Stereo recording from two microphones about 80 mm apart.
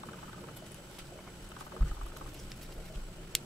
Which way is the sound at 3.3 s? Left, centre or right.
Centre.